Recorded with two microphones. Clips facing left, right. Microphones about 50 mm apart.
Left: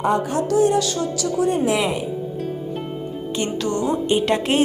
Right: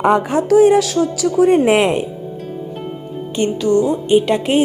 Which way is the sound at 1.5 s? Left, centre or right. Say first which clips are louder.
Right 7 dB; right.